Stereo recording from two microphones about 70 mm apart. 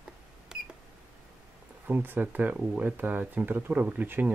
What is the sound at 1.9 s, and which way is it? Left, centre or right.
Speech, right.